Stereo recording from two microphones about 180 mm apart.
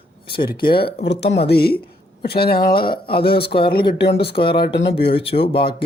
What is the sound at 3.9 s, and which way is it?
Speech, 65° left (ahead or behind).